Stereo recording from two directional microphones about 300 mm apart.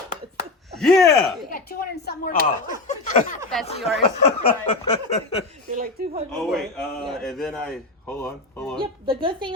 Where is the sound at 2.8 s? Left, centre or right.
Left.